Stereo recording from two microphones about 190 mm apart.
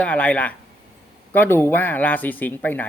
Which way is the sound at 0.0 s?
10° left (ahead or behind).